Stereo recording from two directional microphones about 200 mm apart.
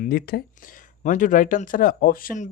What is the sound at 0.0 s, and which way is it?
Speech, 50° left (ahead or behind).